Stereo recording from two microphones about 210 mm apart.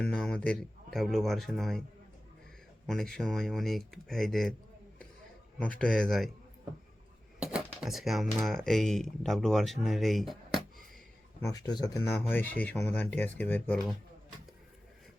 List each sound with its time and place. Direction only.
0.0 s speech: 5° left (ahead or behind)
2.8 s speech: centre (ahead or behind)
5.8 s speech: 5° left (ahead or behind)
7.3 s a sound: 5° right (ahead or behind)
8.4 s speech: centre (ahead or behind)
11.4 s speech: 20° left (ahead or behind)